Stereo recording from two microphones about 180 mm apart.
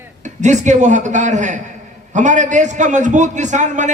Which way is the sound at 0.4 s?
40° right (ahead or behind).